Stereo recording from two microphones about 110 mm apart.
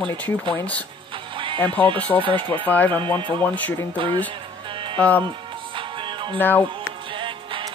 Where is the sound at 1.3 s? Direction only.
50° right (ahead or behind).